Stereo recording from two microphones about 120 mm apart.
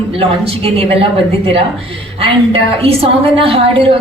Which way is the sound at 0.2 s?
50° right (ahead or behind).